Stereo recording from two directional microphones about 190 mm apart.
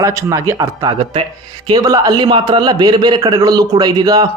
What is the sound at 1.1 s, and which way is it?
Speech, 25° right (ahead or behind).